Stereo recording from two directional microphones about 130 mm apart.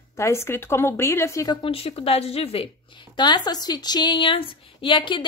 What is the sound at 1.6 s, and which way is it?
Speech, 45° left (ahead or behind).